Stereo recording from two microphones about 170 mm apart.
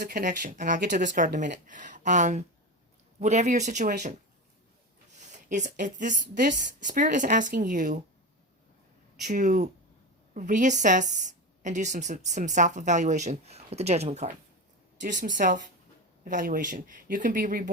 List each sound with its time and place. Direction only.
0.0 s a woman's voice: 60° right (ahead or behind)
5.5 s a woman's voice: 45° right (ahead or behind)
9.2 s a woman's voice: 45° right (ahead or behind)